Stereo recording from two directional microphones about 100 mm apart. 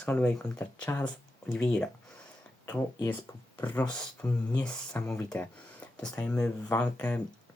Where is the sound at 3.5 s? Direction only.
20° left (ahead or behind).